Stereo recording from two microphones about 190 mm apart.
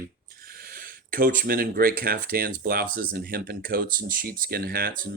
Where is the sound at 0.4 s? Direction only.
50° right (ahead or behind).